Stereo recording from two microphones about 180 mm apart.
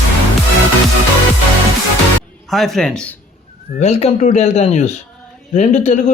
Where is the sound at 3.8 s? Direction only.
35° left (ahead or behind).